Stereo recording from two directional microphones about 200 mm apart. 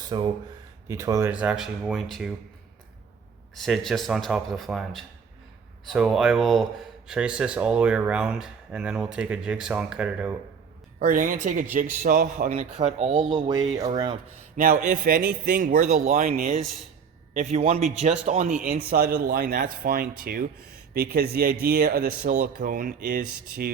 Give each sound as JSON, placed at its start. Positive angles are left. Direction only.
{"t": 0.1, "sound": "speech", "side_deg": -20}
{"t": 3.5, "sound": "speech", "side_deg": 0}
{"t": 11.0, "sound": "speech", "side_deg": -40}
{"t": 14.5, "sound": "speech", "side_deg": -40}
{"t": 18.6, "sound": "speech", "side_deg": -45}